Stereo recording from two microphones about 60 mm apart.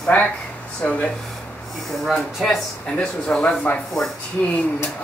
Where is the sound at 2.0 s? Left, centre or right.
Centre.